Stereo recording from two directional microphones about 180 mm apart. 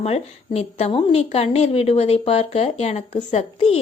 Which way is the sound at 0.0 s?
35° left (ahead or behind).